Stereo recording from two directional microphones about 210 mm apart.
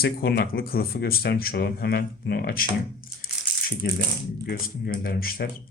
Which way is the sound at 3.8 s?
45° left (ahead or behind).